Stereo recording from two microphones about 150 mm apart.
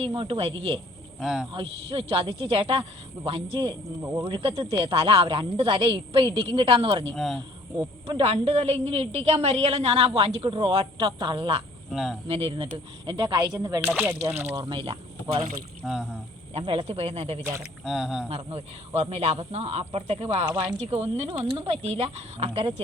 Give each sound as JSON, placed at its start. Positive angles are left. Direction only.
{"t": 0.0, "sound": "a woman's voice", "side_deg": -35}
{"t": 1.2, "sound": "speech", "side_deg": -5}
{"t": 1.5, "sound": "a woman's voice", "side_deg": -40}
{"t": 7.1, "sound": "speech", "side_deg": 0}
{"t": 7.8, "sound": "a woman's voice", "side_deg": -35}
{"t": 11.9, "sound": "speech", "side_deg": 0}
{"t": 12.3, "sound": "a woman's voice", "side_deg": -40}
{"t": 13.8, "sound": "speech", "side_deg": -15}
{"t": 14.6, "sound": "a woman's voice", "side_deg": -35}
{"t": 15.8, "sound": "speech", "side_deg": -5}
{"t": 16.6, "sound": "a woman's voice", "side_deg": -40}
{"t": 17.6, "sound": "speech", "side_deg": -5}
{"t": 18.3, "sound": "a woman's voice", "side_deg": -40}